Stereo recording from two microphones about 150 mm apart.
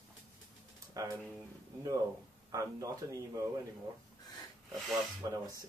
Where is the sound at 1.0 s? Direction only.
20° right (ahead or behind).